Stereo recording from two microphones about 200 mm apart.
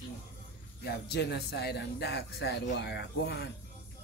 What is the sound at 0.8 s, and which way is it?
Speech, 55° left (ahead or behind).